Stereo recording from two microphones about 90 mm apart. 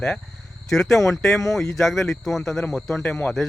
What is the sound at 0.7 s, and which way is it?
Speech, centre (ahead or behind).